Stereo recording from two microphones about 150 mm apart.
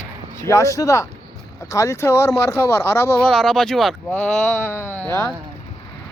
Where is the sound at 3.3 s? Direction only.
5° left (ahead or behind).